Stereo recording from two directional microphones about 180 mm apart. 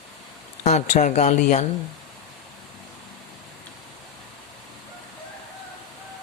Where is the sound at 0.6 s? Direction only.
40° left (ahead or behind).